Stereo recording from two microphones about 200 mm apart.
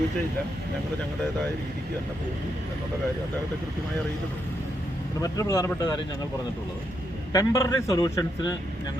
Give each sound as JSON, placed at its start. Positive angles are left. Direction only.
{"t": 5.2, "sound": "a man's voice", "side_deg": 15}
{"t": 7.3, "sound": "a man's voice", "side_deg": 15}